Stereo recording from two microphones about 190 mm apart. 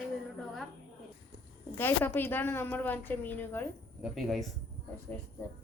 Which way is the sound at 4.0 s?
Centre (ahead or behind).